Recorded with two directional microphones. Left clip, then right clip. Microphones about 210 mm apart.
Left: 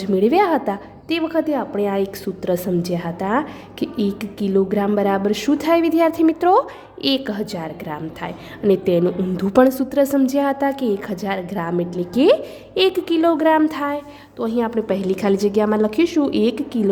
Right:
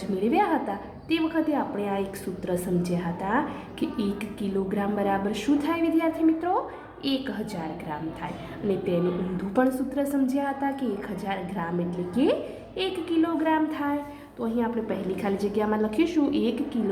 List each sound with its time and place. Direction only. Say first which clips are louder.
0.2 s a woman's voice: left 7 dB; 50° left (ahead or behind)